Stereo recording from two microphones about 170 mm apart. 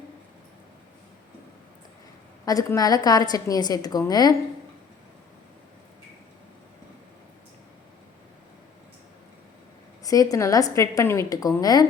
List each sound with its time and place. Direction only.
2.4 s a woman's voice: 20° left (ahead or behind)
10.0 s a woman's voice: 20° left (ahead or behind)